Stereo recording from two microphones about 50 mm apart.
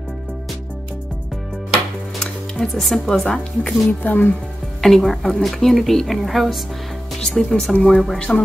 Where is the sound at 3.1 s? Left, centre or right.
Centre.